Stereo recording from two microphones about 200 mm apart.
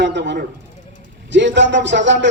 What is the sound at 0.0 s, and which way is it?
A man's voice, 60° right (ahead or behind).